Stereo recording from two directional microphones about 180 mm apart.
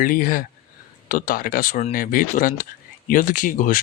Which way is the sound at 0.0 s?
50° left (ahead or behind).